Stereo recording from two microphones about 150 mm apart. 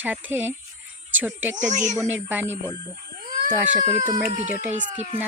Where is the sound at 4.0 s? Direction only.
55° right (ahead or behind).